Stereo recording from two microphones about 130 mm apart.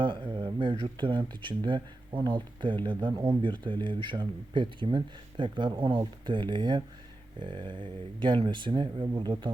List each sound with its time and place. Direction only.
0.0 s speech: 40° right (ahead or behind)